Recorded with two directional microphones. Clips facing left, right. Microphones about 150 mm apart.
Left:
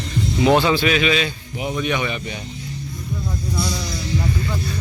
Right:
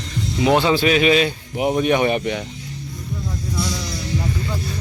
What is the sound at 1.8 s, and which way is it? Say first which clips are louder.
Speech: right 6 dB; 45° right (ahead or behind).